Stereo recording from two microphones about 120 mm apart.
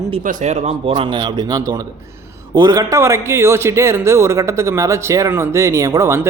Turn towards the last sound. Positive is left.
turn(degrees=-25)  # may be behind; listen again after turning